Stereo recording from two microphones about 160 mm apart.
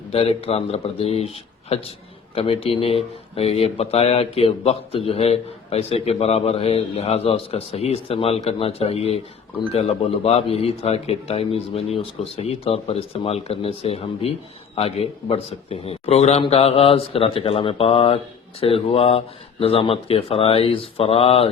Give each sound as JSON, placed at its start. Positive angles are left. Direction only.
{"t": 0.1, "sound": "speech", "side_deg": 40}